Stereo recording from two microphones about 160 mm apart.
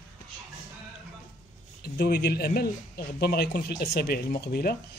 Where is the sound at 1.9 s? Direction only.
90° left.